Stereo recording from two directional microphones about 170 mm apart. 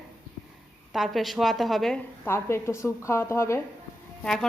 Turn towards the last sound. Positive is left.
turn(degrees=5)  # may be behind; listen again after turning